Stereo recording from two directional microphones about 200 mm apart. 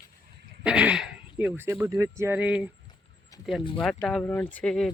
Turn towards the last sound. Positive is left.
turn(degrees=0)  # may be behind; listen again after turning